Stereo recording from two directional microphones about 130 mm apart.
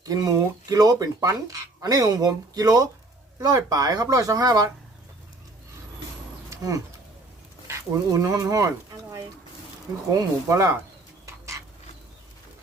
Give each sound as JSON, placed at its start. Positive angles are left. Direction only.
{"t": 0.0, "sound": "speech", "side_deg": -30}
{"t": 6.5, "sound": "a sound", "side_deg": -25}
{"t": 7.7, "sound": "speech", "side_deg": -30}